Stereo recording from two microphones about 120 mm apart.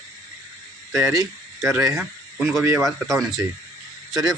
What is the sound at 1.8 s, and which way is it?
Speech, 5° right (ahead or behind).